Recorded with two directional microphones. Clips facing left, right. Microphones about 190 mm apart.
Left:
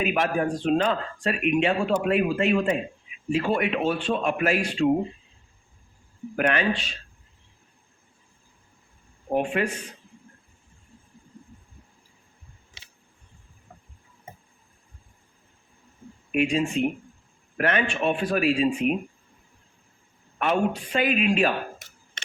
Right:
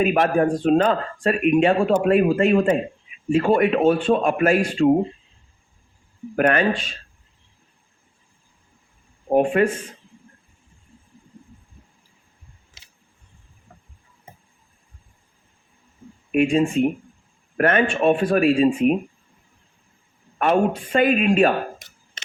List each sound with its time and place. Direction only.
0.0 s speech: 45° right (ahead or behind)
6.3 s speech: 45° right (ahead or behind)
9.3 s speech: 45° right (ahead or behind)
16.3 s speech: 50° right (ahead or behind)
20.4 s speech: 50° right (ahead or behind)